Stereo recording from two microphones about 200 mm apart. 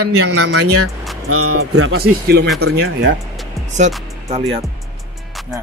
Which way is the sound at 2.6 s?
75° right (ahead or behind).